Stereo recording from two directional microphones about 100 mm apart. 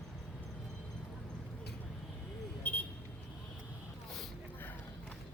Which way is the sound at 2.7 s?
20° left (ahead or behind).